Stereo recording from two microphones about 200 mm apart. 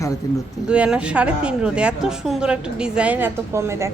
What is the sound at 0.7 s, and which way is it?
A woman's voice, 5° right (ahead or behind).